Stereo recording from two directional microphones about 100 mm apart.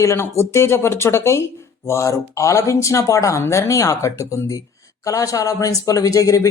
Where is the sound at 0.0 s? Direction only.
30° left (ahead or behind).